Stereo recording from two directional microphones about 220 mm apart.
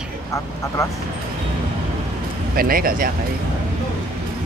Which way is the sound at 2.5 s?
40° right (ahead or behind).